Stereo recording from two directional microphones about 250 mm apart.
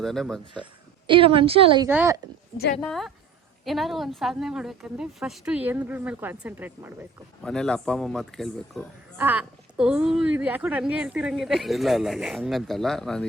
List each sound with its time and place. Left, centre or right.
0.0 s speech: centre
1.0 s a woman's voice: right
1.9 s speech: centre
2.8 s speech: centre